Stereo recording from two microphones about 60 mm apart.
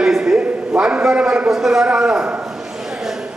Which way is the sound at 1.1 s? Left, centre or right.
Centre.